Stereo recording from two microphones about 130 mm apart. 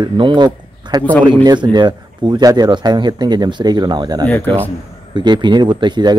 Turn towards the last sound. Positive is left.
turn(degrees=-35)  # may be behind; listen again after turning